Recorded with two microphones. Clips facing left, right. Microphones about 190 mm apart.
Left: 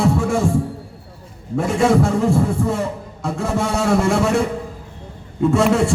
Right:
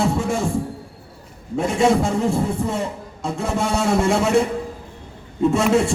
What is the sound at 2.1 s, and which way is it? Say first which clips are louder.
Speech: left 3 dB; 20° right (ahead or behind).